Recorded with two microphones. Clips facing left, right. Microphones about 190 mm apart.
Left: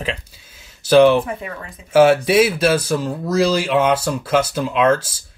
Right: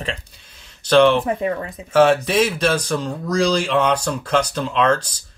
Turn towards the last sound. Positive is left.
turn(degrees=5)  # may be behind; listen again after turning